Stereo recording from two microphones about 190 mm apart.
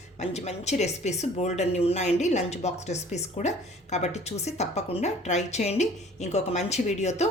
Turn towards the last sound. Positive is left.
turn(degrees=35)  # may be behind; listen again after turning